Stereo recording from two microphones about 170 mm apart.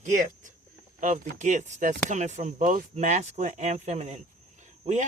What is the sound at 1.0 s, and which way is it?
Speech, 45° right (ahead or behind).